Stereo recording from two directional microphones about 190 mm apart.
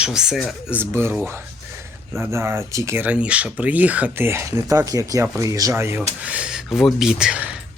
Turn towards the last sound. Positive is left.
turn(degrees=-5)  # may be behind; listen again after turning